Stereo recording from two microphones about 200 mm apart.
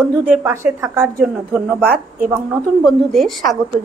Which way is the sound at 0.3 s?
10° right (ahead or behind).